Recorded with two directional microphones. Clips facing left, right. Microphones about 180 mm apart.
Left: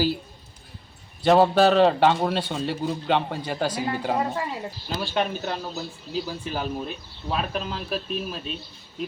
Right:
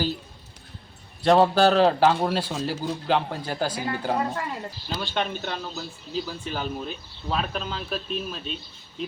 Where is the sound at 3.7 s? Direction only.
30° left (ahead or behind).